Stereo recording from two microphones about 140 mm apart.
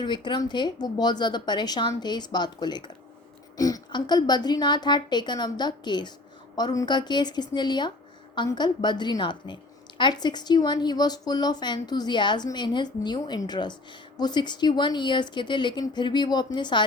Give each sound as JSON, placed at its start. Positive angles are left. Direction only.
{"t": 0.0, "sound": "speech", "side_deg": 35}